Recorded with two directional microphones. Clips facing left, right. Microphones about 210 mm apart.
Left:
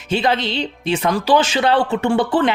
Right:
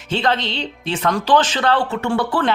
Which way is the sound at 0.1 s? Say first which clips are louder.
Left 2 dB; 10° left (ahead or behind).